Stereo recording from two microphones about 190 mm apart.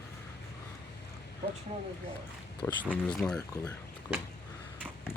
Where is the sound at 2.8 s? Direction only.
Centre (ahead or behind).